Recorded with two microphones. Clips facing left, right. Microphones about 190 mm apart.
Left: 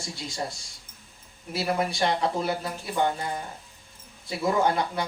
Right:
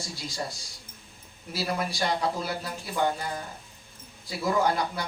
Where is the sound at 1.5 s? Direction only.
25° left (ahead or behind).